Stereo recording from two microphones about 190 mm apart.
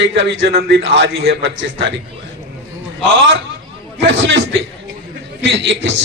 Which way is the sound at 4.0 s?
75° right (ahead or behind).